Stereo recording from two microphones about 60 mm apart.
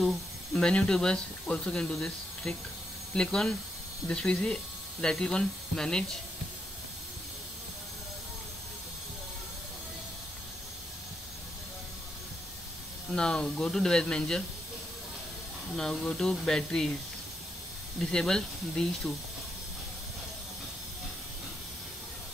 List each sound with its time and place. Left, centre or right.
0.0 s a sound: centre
0.6 s speech: centre
13.1 s speech: centre
15.7 s speech: centre
18.1 s speech: centre